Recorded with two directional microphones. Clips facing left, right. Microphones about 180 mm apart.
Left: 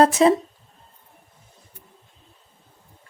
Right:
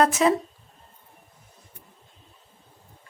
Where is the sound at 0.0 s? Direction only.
30° left (ahead or behind).